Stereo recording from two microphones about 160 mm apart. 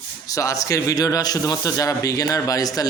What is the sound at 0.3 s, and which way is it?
Speech, 20° left (ahead or behind).